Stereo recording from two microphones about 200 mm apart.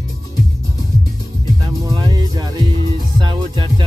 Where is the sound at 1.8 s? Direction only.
20° right (ahead or behind).